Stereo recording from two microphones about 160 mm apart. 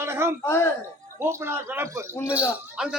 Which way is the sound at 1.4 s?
15° right (ahead or behind).